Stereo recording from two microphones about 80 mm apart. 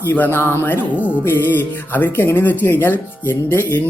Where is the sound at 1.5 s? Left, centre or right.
Left.